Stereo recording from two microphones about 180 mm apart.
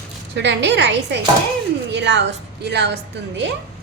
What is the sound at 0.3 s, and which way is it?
A woman's voice, 75° right (ahead or behind).